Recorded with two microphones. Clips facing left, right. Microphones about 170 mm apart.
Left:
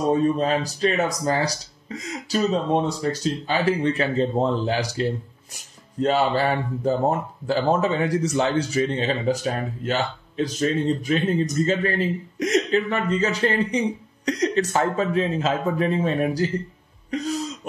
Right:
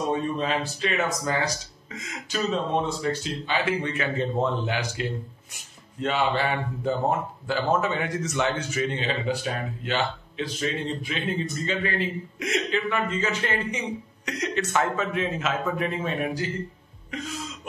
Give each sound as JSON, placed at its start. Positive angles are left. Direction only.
{"t": 0.1, "sound": "speech", "side_deg": 40}
{"t": 17.1, "sound": "throat clearing", "side_deg": 35}